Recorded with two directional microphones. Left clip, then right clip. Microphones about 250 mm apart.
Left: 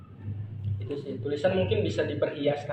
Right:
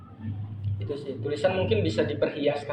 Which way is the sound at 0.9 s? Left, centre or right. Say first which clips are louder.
Right 1 dB; right.